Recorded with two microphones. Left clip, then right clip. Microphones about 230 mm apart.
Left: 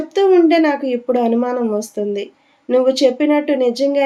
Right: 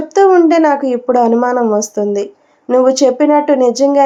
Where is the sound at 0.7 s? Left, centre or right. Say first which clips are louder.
Right 5 dB; right.